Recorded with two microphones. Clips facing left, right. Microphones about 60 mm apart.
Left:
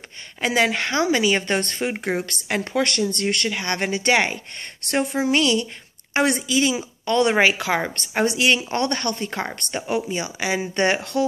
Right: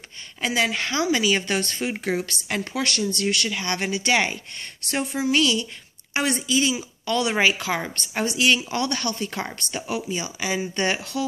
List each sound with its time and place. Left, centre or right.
0.5 s a woman's voice: left
10.2 s a woman's voice: left